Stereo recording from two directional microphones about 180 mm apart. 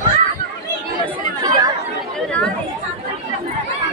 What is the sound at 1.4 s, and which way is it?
Chatter, 20° right (ahead or behind).